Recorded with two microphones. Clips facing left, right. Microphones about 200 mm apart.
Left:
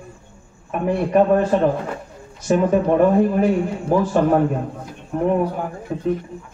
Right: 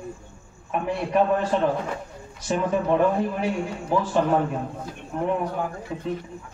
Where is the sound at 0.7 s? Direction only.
50° left (ahead or behind).